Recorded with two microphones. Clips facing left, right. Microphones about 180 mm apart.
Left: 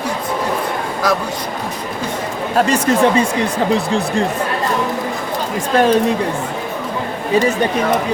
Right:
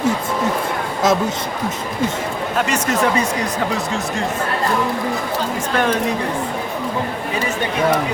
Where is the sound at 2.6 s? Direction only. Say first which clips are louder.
Left 6 dB; 35° left (ahead or behind).